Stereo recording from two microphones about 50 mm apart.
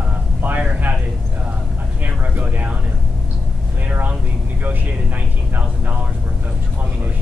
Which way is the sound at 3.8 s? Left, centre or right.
Right.